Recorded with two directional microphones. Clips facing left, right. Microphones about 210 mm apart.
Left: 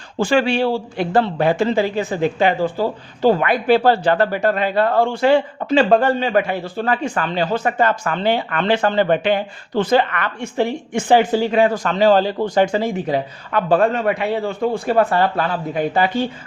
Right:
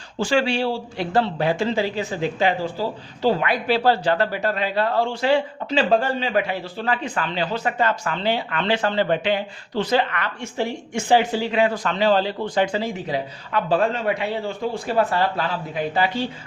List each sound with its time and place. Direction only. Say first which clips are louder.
0.2 s a man's voice: left 4 dB; 55° left (ahead or behind)